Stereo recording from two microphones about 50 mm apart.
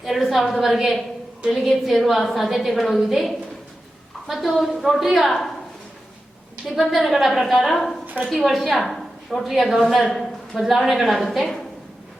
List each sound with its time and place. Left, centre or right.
0.0 s a woman's voice: centre
6.7 s a woman's voice: centre
8.0 s a sound: right
8.3 s a woman's voice: centre